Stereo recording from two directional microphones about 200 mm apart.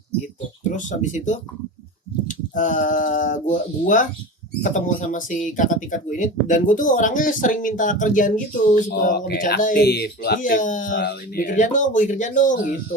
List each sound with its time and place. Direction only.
0.9 s speech: 40° left (ahead or behind)
9.8 s speech: 55° left (ahead or behind)
10.9 s speech: 55° left (ahead or behind)